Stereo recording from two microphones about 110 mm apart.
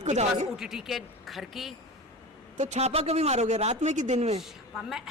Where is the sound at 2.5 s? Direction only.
90° right.